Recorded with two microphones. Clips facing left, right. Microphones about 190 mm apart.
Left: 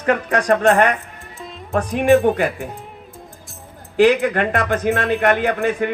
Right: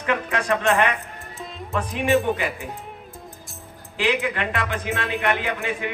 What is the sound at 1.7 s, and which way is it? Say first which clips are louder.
Speech: left 7 dB; 55° left (ahead or behind).